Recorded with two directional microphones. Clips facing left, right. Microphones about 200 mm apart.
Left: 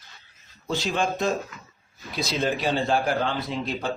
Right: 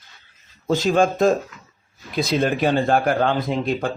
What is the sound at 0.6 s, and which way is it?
Speech, 45° right (ahead or behind).